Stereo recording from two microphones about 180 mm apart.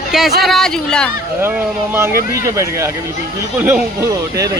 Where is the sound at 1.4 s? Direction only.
10° right (ahead or behind).